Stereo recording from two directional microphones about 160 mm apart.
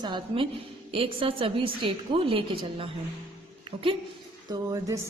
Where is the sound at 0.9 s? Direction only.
35° right (ahead or behind).